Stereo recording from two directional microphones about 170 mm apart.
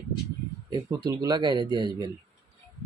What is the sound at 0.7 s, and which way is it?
A man's voice, 20° right (ahead or behind).